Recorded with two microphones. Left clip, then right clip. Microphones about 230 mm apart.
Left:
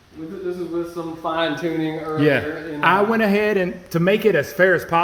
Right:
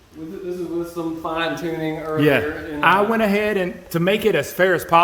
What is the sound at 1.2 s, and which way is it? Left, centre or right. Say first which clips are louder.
Speech: left 3 dB; right.